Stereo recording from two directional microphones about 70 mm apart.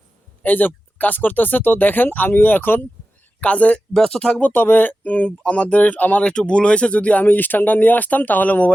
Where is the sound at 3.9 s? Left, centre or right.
Centre.